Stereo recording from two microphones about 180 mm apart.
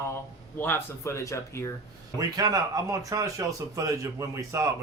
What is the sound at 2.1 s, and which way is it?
Speech, 20° right (ahead or behind).